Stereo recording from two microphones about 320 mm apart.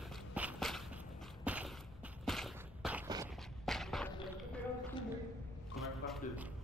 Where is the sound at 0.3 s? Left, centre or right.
Centre.